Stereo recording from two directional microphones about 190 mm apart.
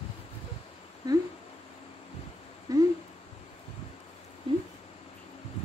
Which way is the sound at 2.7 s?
20° right (ahead or behind).